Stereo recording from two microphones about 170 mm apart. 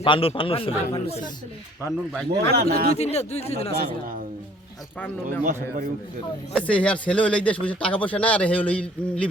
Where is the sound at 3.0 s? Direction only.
40° left (ahead or behind).